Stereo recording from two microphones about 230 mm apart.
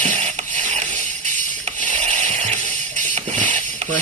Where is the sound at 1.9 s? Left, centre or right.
Right.